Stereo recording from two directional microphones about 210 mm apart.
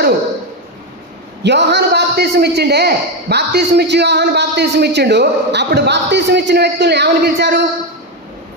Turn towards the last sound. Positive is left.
turn(degrees=-55)  # may be behind; listen again after turning